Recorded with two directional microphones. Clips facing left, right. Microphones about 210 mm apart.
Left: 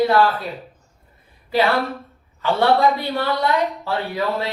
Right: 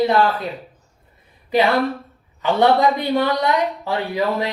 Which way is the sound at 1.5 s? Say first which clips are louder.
Right 2 dB; 20° right (ahead or behind).